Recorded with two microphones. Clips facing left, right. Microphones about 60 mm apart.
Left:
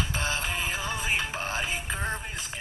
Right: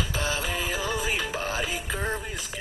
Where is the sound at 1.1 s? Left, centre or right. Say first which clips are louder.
Right 1 dB; centre.